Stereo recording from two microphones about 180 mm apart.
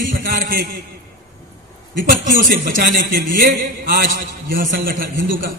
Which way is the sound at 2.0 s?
50° right (ahead or behind).